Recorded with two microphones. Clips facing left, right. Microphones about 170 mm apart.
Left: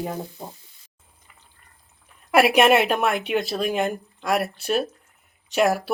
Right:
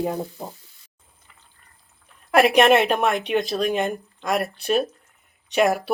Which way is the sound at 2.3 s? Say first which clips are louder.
Right 1 dB; 5° left (ahead or behind).